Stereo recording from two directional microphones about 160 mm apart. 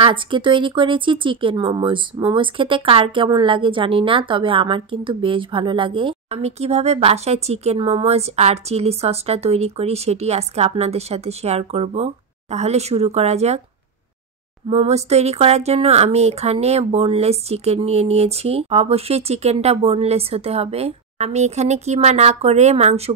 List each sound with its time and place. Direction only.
0.0 s speech: 30° right (ahead or behind)
14.7 s speech: 40° right (ahead or behind)